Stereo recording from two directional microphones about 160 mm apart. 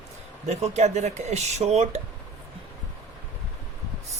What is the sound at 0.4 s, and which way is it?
Speech, 45° right (ahead or behind).